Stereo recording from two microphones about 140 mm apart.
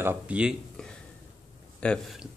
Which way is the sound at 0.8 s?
5° left (ahead or behind).